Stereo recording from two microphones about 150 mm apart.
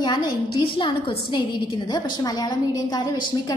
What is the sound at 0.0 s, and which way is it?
A woman's voice, 30° left (ahead or behind).